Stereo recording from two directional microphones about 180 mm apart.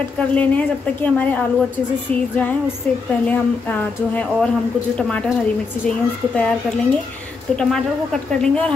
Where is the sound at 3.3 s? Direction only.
10° left (ahead or behind).